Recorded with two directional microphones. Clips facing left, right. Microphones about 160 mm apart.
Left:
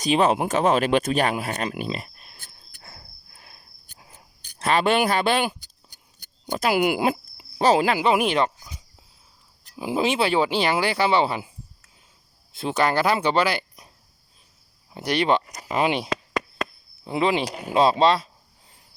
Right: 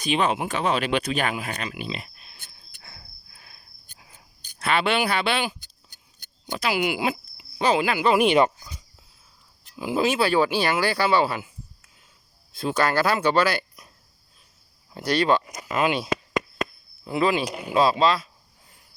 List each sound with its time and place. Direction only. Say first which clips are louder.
0.0 s speech: left 4 dB; 40° left (ahead or behind)
4.6 s speech: left 3 dB; 40° left (ahead or behind)
5.6 s a sound: left 2 dB; 10° left (ahead or behind)
6.5 s speech: left 4 dB; 45° left (ahead or behind)
8.2 s speech: right 4 dB; centre (ahead or behind)
9.7 s speech: even; 20° left (ahead or behind)
12.5 s speech: left 1 dB; 20° left (ahead or behind)
14.9 s speech: even; 20° left (ahead or behind)